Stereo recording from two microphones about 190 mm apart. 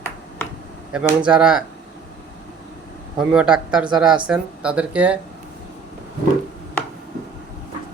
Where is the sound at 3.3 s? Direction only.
5° right (ahead or behind).